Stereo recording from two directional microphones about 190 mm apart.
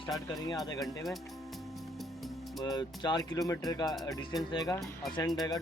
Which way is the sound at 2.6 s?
20° left (ahead or behind).